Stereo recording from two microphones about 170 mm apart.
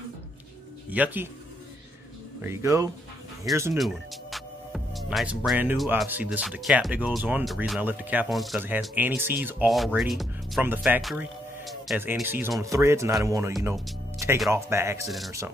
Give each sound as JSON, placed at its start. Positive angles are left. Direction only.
{"t": 0.8, "sound": "speech", "side_deg": -10}
{"t": 2.4, "sound": "speech", "side_deg": -15}
{"t": 3.7, "sound": "music", "side_deg": 0}
{"t": 6.0, "sound": "speech", "side_deg": -10}
{"t": 8.5, "sound": "speech", "side_deg": -10}
{"t": 10.6, "sound": "speech", "side_deg": -10}
{"t": 11.0, "sound": "music", "side_deg": 0}
{"t": 12.0, "sound": "speech", "side_deg": -10}
{"t": 13.7, "sound": "music", "side_deg": 0}
{"t": 14.5, "sound": "speech", "side_deg": -15}
{"t": 15.0, "sound": "speech", "side_deg": 0}